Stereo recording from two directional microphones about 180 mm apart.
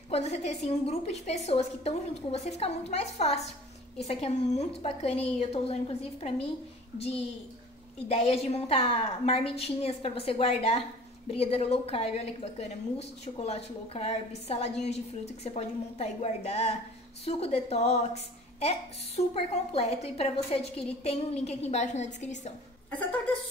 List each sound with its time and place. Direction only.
0.1 s a woman's voice: 35° left (ahead or behind)
22.8 s speech: 10° left (ahead or behind)